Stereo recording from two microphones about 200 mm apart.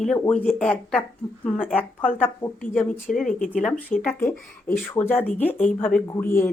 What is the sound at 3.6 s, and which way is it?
Speech, 5° left (ahead or behind).